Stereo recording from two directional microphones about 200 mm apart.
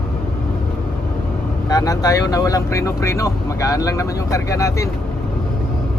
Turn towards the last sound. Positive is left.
turn(degrees=15)  # may be behind; listen again after turning